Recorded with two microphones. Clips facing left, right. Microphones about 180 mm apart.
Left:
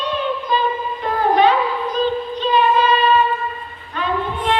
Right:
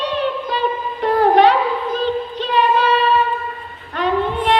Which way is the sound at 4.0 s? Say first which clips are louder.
Right 4 dB; 70° right (ahead or behind).